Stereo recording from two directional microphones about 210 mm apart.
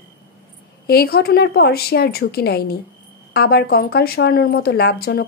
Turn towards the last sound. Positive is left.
turn(degrees=50)  # may be behind; listen again after turning